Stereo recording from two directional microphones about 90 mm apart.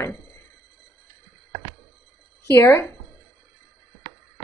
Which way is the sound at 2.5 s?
25° left (ahead or behind).